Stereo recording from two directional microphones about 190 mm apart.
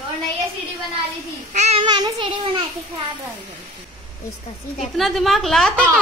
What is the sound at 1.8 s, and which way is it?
Child singing, 25° right (ahead or behind).